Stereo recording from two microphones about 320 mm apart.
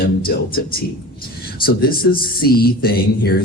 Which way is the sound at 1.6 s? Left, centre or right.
Left.